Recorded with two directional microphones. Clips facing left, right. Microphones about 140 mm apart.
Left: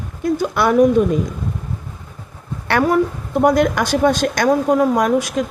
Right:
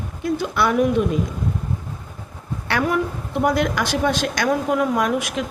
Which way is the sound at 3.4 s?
45° left (ahead or behind).